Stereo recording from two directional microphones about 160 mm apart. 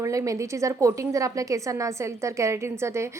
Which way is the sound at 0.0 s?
20° right (ahead or behind).